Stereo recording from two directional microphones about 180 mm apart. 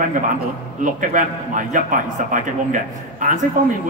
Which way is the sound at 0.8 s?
45° right (ahead or behind).